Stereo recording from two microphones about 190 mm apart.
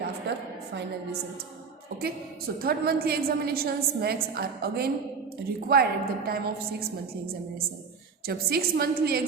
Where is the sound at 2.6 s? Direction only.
55° right (ahead or behind).